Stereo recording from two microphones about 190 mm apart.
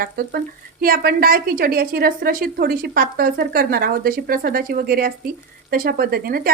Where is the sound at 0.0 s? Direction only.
50° right (ahead or behind).